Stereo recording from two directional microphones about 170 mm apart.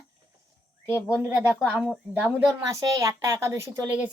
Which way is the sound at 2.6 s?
20° right (ahead or behind).